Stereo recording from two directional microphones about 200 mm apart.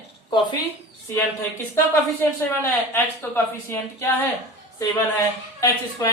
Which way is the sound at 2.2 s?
10° left (ahead or behind).